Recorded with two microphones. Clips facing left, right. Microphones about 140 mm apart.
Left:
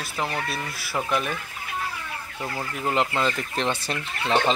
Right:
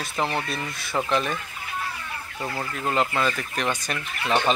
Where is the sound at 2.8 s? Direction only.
15° left (ahead or behind).